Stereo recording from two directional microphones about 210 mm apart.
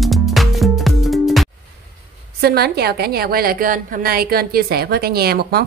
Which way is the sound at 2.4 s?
50° right (ahead or behind).